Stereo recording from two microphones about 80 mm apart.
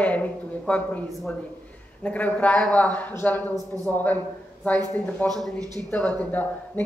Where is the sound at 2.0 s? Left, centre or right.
Centre.